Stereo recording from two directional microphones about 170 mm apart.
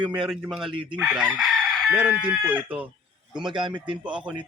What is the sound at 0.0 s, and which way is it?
A man's voice, 5° right (ahead or behind).